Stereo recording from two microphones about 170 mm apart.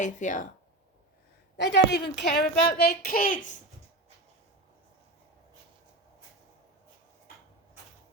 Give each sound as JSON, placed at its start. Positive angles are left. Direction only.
{"t": 0.0, "sound": "speech", "side_deg": 45}
{"t": 1.5, "sound": "a woman's voice", "side_deg": 85}